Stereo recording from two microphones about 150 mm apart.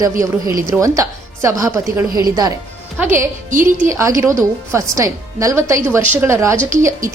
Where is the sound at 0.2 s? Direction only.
20° right (ahead or behind).